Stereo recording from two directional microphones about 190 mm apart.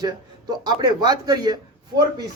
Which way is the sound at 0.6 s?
20° right (ahead or behind).